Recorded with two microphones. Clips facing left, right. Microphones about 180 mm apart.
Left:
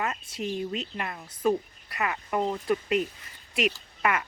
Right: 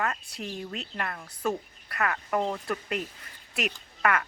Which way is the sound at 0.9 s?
10° left (ahead or behind).